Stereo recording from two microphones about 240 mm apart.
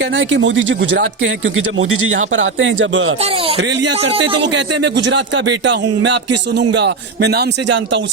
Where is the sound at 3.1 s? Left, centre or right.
Right.